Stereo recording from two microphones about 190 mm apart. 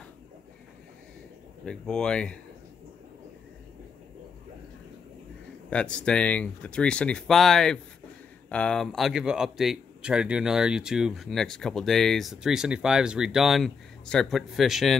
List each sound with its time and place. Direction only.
1.6 s speech: 5° left (ahead or behind)
5.7 s speech: 5° left (ahead or behind)